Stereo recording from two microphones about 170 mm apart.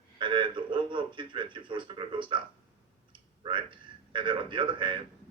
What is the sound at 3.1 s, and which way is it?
A man's voice, 30° right (ahead or behind).